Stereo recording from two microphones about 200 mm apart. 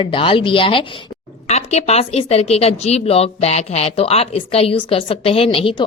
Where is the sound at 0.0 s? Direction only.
25° left (ahead or behind).